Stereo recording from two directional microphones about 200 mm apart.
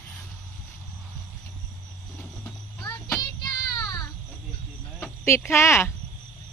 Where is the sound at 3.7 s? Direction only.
20° left (ahead or behind).